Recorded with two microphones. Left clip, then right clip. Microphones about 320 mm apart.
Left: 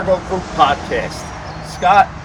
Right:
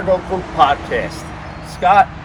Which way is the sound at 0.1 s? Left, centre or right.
Centre.